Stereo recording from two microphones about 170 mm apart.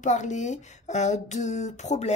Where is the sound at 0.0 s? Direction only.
45° left (ahead or behind).